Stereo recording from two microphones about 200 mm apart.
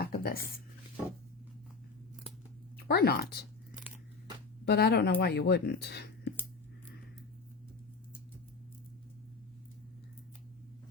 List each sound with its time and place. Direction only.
0.0 s a sound: 50° left (ahead or behind)
2.7 s speech: 50° left (ahead or behind)
4.6 s speech: 55° left (ahead or behind)